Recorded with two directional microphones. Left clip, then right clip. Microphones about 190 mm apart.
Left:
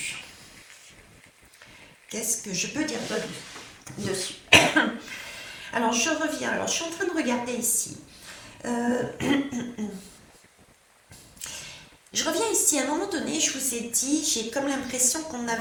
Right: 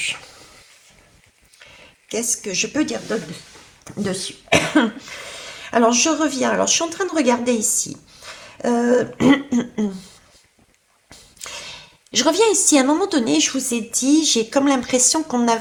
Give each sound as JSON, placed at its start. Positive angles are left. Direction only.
{"t": 2.0, "sound": "a woman's voice", "side_deg": -40}
{"t": 11.3, "sound": "a woman's voice", "side_deg": -40}